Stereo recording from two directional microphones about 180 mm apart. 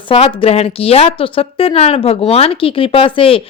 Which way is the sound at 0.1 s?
30° left (ahead or behind).